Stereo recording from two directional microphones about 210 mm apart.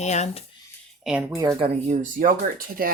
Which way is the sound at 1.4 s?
20° right (ahead or behind).